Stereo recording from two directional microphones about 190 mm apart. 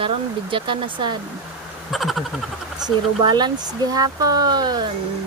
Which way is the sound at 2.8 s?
25° right (ahead or behind).